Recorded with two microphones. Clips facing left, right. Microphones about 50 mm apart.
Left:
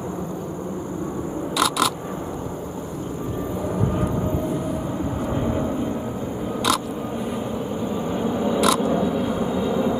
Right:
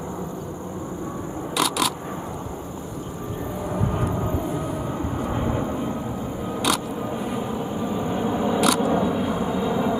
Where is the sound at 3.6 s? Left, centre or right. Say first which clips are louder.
Left 1 dB; centre.